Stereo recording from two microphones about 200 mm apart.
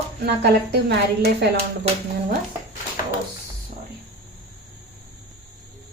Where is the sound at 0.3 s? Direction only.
55° right (ahead or behind).